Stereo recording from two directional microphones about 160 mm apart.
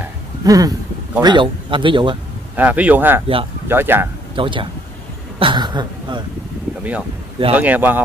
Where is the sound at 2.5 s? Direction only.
10° right (ahead or behind).